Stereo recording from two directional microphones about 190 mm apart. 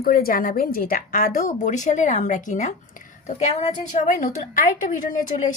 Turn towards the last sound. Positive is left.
turn(degrees=45)  # may be behind; listen again after turning